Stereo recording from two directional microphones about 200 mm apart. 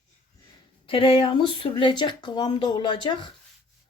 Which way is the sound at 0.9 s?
25° left (ahead or behind).